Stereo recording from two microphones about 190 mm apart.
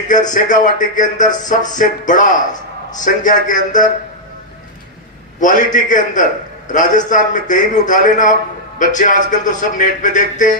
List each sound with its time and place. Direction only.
0.1 s a man's voice: 40° left (ahead or behind)
5.4 s a man's voice: 40° left (ahead or behind)